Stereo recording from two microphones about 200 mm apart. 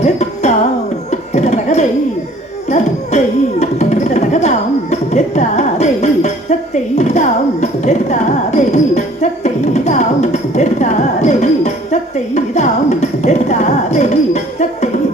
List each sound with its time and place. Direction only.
0.0 s music: 35° left (ahead or behind)
1.1 s a sound: 35° left (ahead or behind)
3.6 s music: 35° left (ahead or behind)